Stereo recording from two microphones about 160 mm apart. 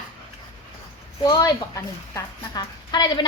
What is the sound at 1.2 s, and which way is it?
A woman's voice, 25° left (ahead or behind).